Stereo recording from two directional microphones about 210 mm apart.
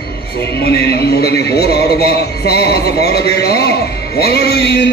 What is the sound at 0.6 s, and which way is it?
A man's voice, 50° left (ahead or behind).